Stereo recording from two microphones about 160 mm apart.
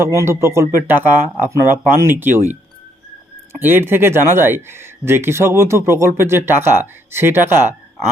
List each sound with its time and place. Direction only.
0.0 s speech: 20° right (ahead or behind)
3.6 s speech: 15° right (ahead or behind)